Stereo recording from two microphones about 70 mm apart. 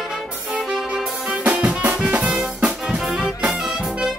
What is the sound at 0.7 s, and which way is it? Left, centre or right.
Music, centre.